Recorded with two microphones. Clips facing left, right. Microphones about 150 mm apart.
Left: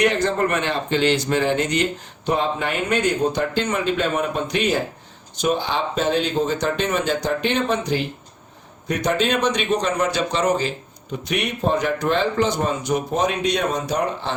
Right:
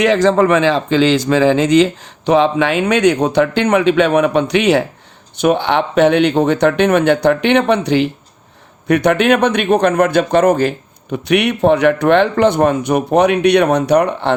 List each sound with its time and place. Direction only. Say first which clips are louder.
0.0 s speech: right 8 dB; 90° right
5.4 s a man's voice: right 8 dB; 65° right (ahead or behind)
8.9 s a man's voice: right 9 dB; 65° right (ahead or behind)